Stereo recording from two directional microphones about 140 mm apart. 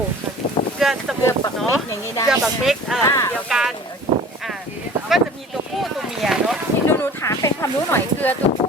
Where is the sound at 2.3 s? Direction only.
5° right (ahead or behind).